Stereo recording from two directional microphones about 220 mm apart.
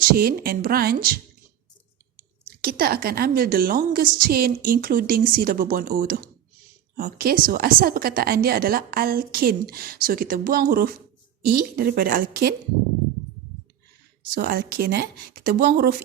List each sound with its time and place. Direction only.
0.0 s a woman's voice: 40° right (ahead or behind)
2.5 s a woman's voice: 45° right (ahead or behind)
14.3 s a woman's voice: 45° right (ahead or behind)